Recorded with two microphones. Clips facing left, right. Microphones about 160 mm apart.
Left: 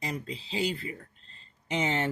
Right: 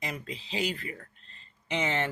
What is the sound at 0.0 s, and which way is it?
Speech, 35° left (ahead or behind).